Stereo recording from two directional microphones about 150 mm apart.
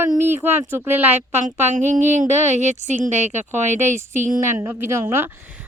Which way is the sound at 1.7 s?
55° right (ahead or behind).